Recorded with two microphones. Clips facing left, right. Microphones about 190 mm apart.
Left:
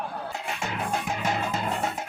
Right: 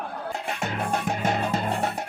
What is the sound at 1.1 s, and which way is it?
Music, 55° right (ahead or behind).